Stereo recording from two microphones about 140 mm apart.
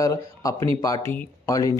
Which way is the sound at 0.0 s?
25° left (ahead or behind).